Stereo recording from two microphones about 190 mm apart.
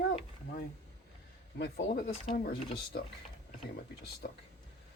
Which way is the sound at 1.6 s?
65° left (ahead or behind).